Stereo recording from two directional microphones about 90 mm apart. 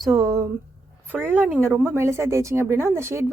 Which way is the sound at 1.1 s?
20° right (ahead or behind).